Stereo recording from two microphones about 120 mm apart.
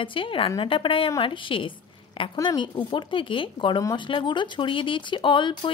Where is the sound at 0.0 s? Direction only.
45° left (ahead or behind).